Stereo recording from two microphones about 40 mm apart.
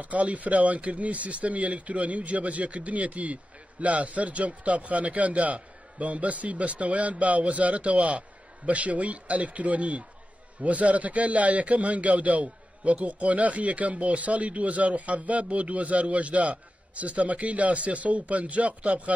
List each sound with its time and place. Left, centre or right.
0.0 s a man's voice: right